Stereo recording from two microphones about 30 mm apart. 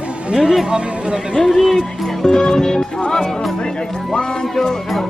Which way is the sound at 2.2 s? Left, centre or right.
Left.